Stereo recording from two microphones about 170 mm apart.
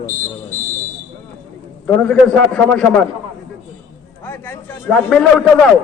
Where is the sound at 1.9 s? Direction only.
5° left (ahead or behind).